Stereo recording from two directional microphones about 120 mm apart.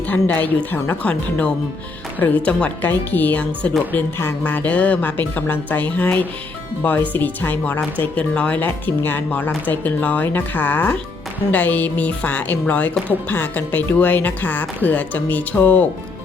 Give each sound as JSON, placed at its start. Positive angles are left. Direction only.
{"t": 0.1, "sound": "speech", "side_deg": 15}